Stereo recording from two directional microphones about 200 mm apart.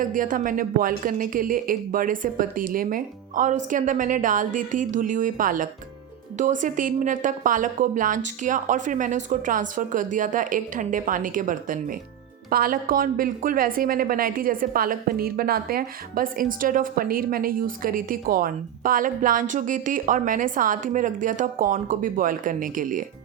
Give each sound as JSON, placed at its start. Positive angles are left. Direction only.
{"t": 0.0, "sound": "a woman's voice", "side_deg": -40}